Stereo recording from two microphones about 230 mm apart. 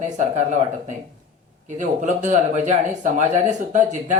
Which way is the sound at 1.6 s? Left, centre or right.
Right.